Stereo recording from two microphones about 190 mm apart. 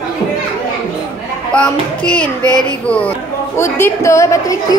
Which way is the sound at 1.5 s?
5° left (ahead or behind).